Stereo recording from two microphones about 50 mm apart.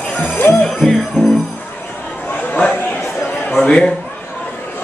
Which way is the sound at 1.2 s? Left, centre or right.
Left.